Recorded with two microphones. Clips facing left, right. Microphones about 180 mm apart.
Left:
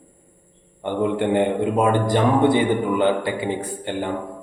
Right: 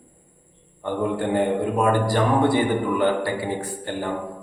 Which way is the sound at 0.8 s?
20° left (ahead or behind).